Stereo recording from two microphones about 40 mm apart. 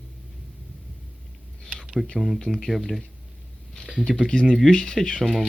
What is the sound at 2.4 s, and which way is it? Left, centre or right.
Speech, centre.